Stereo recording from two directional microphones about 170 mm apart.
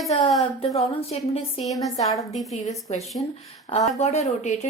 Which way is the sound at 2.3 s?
Centre (ahead or behind).